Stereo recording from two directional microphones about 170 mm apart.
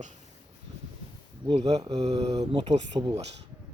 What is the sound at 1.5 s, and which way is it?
Speech, 35° right (ahead or behind).